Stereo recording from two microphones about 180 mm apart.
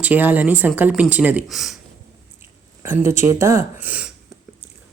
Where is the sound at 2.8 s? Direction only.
15° right (ahead or behind).